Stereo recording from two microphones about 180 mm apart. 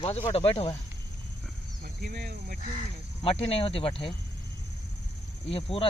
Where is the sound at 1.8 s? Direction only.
55° right (ahead or behind).